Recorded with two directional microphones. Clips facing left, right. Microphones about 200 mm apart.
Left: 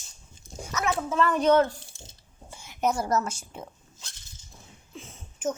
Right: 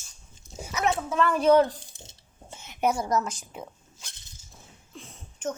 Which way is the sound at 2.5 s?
20° right (ahead or behind).